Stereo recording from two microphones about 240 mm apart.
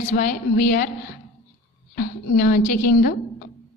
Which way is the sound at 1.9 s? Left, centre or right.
Left.